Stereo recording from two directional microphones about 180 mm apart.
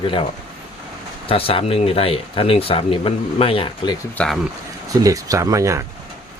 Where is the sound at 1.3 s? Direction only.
30° left (ahead or behind).